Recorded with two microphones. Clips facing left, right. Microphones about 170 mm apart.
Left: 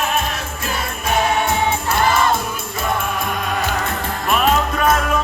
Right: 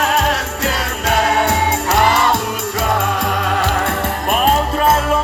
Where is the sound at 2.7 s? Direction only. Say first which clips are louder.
Right 3 dB; 85° right.